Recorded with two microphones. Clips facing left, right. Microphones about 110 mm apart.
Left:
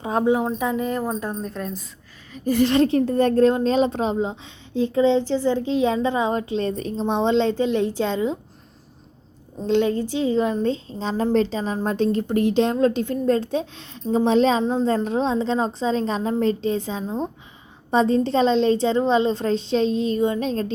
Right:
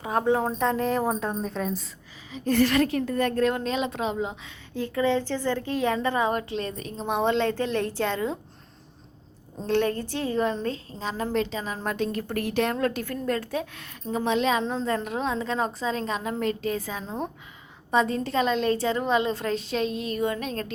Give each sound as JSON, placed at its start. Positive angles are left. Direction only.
{"t": 0.0, "sound": "speech", "side_deg": 20}
{"t": 0.6, "sound": "a woman's voice", "side_deg": 5}
{"t": 2.5, "sound": "a woman's voice", "side_deg": 20}
{"t": 9.6, "sound": "a woman's voice", "side_deg": 15}
{"t": 14.6, "sound": "a woman's voice", "side_deg": 15}
{"t": 14.8, "sound": "a woman's voice", "side_deg": 30}